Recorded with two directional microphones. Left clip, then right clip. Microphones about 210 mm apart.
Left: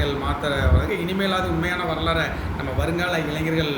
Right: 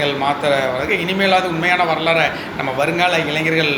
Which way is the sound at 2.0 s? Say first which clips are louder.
Right 7 dB; 40° right (ahead or behind).